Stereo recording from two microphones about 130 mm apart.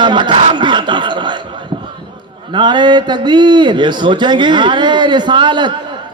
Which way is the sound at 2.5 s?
35° right (ahead or behind).